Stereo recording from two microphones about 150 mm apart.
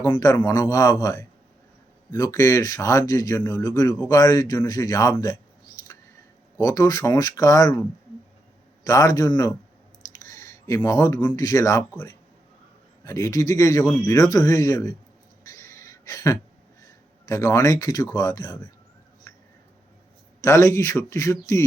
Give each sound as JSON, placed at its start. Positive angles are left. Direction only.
{"t": 0.0, "sound": "speech", "side_deg": 20}
{"t": 6.6, "sound": "speech", "side_deg": 25}
{"t": 15.4, "sound": "a sound", "side_deg": 20}
{"t": 17.2, "sound": "speech", "side_deg": 20}
{"t": 20.4, "sound": "speech", "side_deg": 20}